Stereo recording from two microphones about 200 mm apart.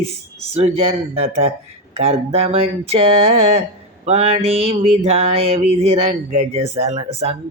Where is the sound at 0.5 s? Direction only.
30° right (ahead or behind).